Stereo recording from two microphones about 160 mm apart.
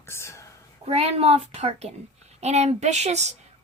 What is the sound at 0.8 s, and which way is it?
A woman's voice, 40° right (ahead or behind).